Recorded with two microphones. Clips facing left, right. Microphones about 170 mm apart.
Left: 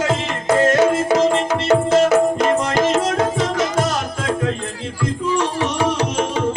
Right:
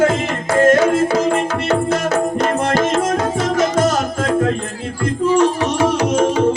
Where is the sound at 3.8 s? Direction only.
45° right (ahead or behind).